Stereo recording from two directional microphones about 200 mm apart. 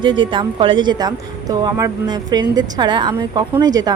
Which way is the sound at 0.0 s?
25° right (ahead or behind).